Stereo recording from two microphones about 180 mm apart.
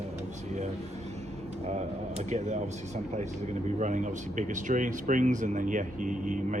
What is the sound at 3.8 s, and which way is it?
Speech, 40° right (ahead or behind).